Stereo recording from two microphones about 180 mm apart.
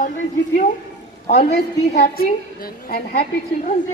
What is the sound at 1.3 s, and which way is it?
Speech, 65° left (ahead or behind).